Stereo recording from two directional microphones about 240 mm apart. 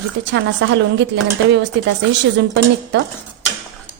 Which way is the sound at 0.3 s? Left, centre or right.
Right.